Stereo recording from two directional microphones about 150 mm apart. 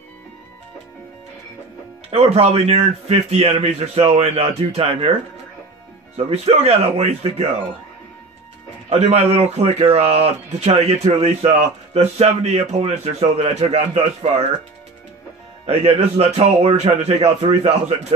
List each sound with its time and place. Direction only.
2.0 s speech: 40° right (ahead or behind)
6.1 s speech: 45° right (ahead or behind)
8.8 s speech: 45° right (ahead or behind)
15.6 s speech: 40° right (ahead or behind)